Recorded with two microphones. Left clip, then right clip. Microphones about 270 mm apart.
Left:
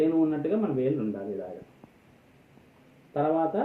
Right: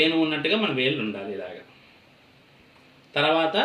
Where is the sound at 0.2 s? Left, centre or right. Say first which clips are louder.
Right 3 dB; right.